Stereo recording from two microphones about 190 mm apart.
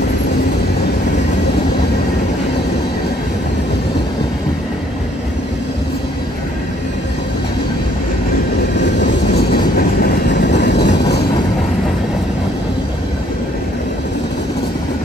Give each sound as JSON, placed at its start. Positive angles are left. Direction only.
{"t": 9.0, "sound": "train", "side_deg": 50}
{"t": 10.4, "sound": "vehicle", "side_deg": 65}